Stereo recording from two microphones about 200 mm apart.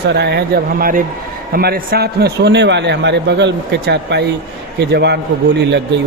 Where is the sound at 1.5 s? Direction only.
50° right (ahead or behind).